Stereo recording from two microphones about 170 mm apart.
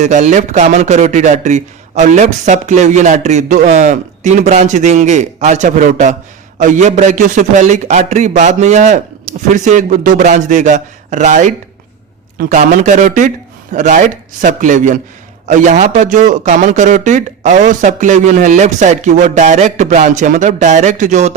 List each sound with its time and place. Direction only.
0.0 s a man's voice: 45° right (ahead or behind)